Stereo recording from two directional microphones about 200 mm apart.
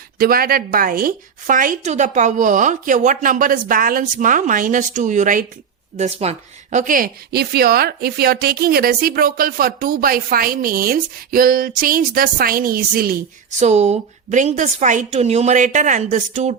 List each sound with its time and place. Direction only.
0.2 s a woman's voice: 45° right (ahead or behind)